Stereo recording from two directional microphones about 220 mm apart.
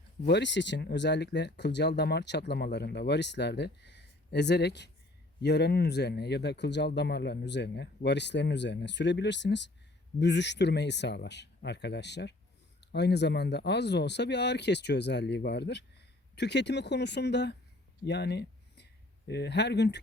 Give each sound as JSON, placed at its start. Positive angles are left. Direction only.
{"t": 0.3, "sound": "speech", "side_deg": 50}
{"t": 18.0, "sound": "a sound", "side_deg": 50}
{"t": 19.3, "sound": "speech", "side_deg": 50}